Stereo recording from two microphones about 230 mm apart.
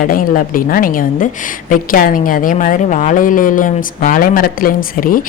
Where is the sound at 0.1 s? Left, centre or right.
Left.